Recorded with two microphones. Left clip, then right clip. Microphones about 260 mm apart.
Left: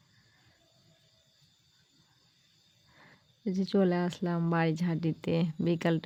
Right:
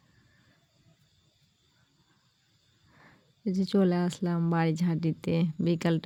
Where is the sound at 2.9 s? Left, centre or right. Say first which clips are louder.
Right 1 dB; right.